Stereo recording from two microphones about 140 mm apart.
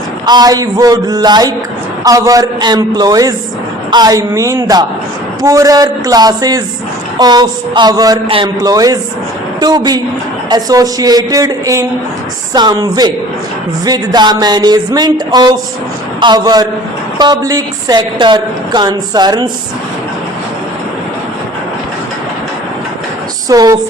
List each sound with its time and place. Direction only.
0.3 s a woman's voice: 30° right (ahead or behind)
23.5 s speech: 25° right (ahead or behind)